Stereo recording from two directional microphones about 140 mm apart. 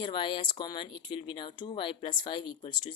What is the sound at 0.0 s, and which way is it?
Speech, 35° left (ahead or behind).